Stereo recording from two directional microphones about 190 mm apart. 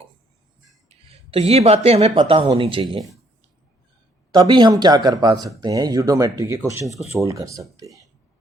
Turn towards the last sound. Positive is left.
turn(degrees=-15)  # may be behind; listen again after turning